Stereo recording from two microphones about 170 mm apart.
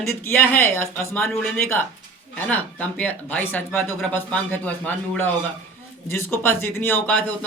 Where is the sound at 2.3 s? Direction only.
10° left (ahead or behind).